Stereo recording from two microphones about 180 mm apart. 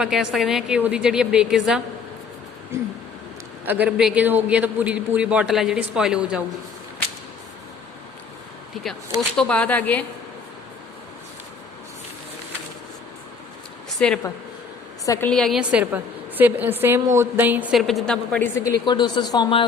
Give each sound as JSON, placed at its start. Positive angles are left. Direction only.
{"t": 0.0, "sound": "a woman's voice", "side_deg": -5}
{"t": 3.7, "sound": "a man's voice", "side_deg": -5}
{"t": 9.4, "sound": "a woman's voice", "side_deg": 5}
{"t": 14.0, "sound": "a woman's voice", "side_deg": 5}
{"t": 15.0, "sound": "a woman's voice", "side_deg": 20}
{"t": 15.3, "sound": "a woman's voice", "side_deg": 5}